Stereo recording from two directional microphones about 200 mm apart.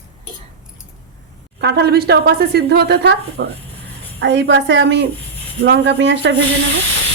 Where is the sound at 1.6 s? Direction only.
55° right (ahead or behind).